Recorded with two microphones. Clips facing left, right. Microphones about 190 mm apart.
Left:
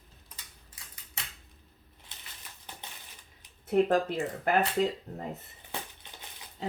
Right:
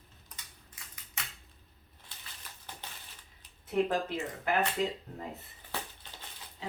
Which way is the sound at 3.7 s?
45° left (ahead or behind).